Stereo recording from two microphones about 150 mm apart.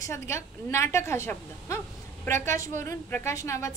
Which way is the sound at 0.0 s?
20° left (ahead or behind).